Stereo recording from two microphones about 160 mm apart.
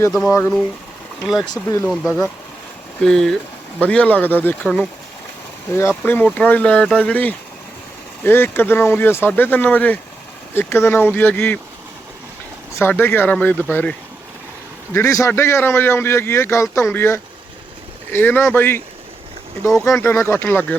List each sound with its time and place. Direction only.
0.3 s a man's voice: 15° left (ahead or behind)
1.2 s a man's voice: centre (ahead or behind)
6.0 s a man's voice: 10° left (ahead or behind)
12.7 s a man's voice: 15° left (ahead or behind)
14.9 s a man's voice: 15° left (ahead or behind)
19.6 s speech: centre (ahead or behind)
19.9 s a man's voice: 15° left (ahead or behind)